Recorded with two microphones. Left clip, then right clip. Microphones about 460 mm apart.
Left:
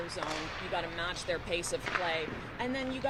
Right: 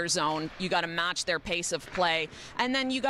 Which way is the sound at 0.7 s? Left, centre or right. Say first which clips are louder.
Right 8 dB; right.